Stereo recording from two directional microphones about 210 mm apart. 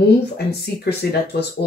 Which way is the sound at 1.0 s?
50° left (ahead or behind).